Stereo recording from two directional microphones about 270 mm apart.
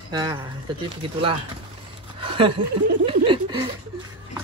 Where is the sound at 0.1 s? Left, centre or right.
Centre.